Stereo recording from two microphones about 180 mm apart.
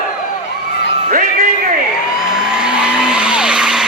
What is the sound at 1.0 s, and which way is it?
Music, 45° right (ahead or behind).